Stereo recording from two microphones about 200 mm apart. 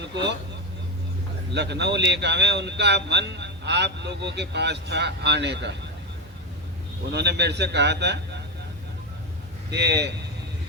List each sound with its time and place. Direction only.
0.0 s speech: 60° right (ahead or behind)
1.5 s speech: 60° right (ahead or behind)
7.1 s speech: 55° right (ahead or behind)
9.6 s speech: 55° right (ahead or behind)